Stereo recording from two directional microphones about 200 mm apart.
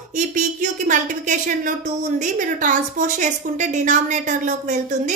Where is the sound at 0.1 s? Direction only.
40° right (ahead or behind).